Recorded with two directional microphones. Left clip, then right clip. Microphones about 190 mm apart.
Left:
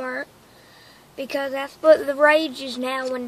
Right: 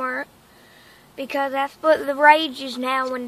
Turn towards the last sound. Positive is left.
turn(degrees=5)  # may be behind; listen again after turning